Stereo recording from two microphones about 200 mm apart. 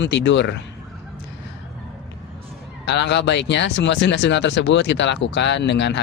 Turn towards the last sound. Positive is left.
turn(degrees=60)  # may be behind; listen again after turning